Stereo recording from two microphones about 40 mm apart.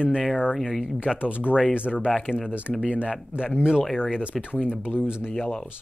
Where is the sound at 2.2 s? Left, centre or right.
Centre.